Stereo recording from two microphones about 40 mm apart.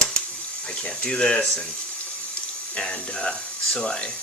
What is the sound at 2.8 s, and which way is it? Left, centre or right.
Speech, centre.